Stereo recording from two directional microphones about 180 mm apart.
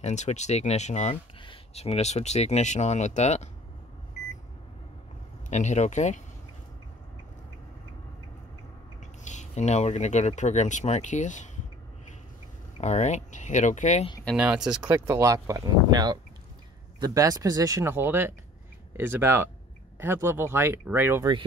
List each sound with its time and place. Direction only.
0.0 s speech: 40° left (ahead or behind)
5.5 s speech: 40° left (ahead or behind)
9.2 s speech: 40° left (ahead or behind)
12.8 s speech: 40° left (ahead or behind)
14.3 s speech: 5° right (ahead or behind)
14.9 s speech: 15° right (ahead or behind)